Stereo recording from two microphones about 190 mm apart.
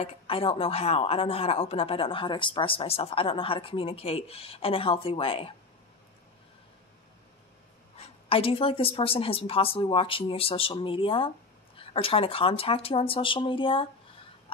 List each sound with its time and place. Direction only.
0.0 s speech: 30° left (ahead or behind)
8.0 s speech: 30° left (ahead or behind)